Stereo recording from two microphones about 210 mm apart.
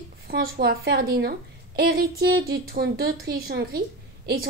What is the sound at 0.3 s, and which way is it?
A woman's voice, 45° right (ahead or behind).